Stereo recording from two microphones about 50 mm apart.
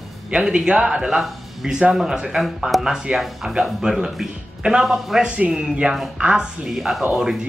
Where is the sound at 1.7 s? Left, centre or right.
Centre.